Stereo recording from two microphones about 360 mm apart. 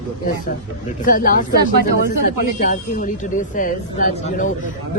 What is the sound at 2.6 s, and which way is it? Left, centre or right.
Speech, left.